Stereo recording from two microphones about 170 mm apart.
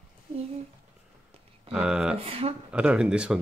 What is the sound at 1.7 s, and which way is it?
Speech, 5° right (ahead or behind).